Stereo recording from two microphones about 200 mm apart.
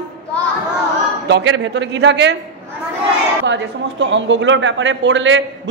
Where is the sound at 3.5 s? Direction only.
65° right (ahead or behind).